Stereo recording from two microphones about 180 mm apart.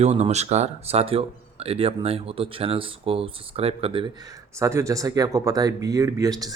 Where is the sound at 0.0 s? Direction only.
40° right (ahead or behind).